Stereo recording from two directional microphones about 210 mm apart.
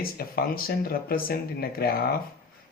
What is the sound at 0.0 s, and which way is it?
Speech, 45° left (ahead or behind).